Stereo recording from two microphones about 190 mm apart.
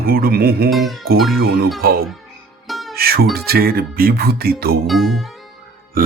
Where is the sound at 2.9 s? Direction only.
55° right (ahead or behind).